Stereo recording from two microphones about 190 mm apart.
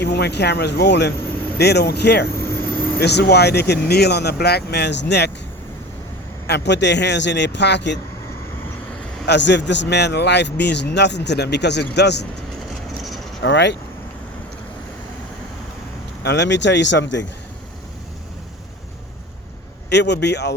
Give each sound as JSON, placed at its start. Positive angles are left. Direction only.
{"t": 0.0, "sound": "speech", "side_deg": 60}
{"t": 2.4, "sound": "vehicle", "side_deg": 10}
{"t": 3.0, "sound": "speech", "side_deg": 60}
{"t": 6.5, "sound": "speech", "side_deg": 65}
{"t": 9.2, "sound": "speech", "side_deg": 65}
{"t": 13.4, "sound": "speech", "side_deg": 70}
{"t": 16.2, "sound": "speech", "side_deg": 65}
{"t": 19.9, "sound": "speech", "side_deg": 65}